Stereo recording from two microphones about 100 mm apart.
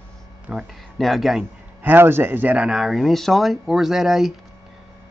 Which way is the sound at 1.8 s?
20° right (ahead or behind).